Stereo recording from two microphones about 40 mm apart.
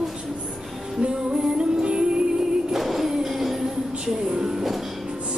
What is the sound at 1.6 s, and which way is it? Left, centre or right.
Music, right.